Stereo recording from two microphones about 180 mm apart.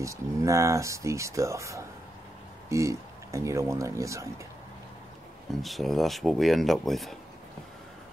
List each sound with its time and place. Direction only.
0.0 s speech: 15° right (ahead or behind)
5.6 s speech: centre (ahead or behind)